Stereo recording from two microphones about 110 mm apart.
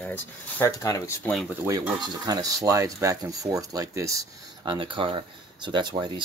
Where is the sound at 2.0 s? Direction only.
35° right (ahead or behind).